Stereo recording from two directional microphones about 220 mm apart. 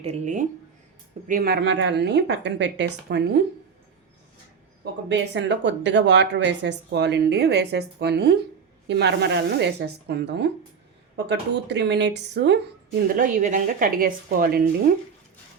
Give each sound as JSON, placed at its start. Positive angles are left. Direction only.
{"t": 0.0, "sound": "speech", "side_deg": -30}
{"t": 1.3, "sound": "speech", "side_deg": -45}
{"t": 4.8, "sound": "speech", "side_deg": -50}
{"t": 13.1, "sound": "speech", "side_deg": -35}